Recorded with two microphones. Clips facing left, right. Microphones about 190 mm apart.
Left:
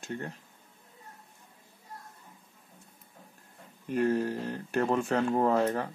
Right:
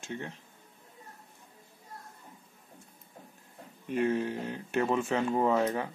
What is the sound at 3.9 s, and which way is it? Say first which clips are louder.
Speech: left 1 dB; centre (ahead or behind).